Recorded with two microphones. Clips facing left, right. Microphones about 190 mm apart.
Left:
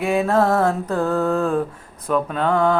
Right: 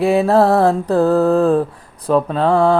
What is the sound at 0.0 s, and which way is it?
Mantra, 35° right (ahead or behind).